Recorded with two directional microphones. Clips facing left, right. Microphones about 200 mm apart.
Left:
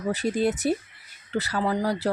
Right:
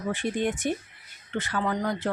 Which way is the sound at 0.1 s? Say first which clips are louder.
Left 3 dB; 40° left (ahead or behind).